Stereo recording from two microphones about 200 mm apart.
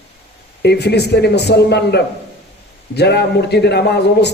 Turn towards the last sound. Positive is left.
turn(degrees=55)  # may be behind; listen again after turning